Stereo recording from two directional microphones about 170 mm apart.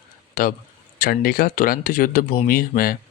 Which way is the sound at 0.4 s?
55° left (ahead or behind).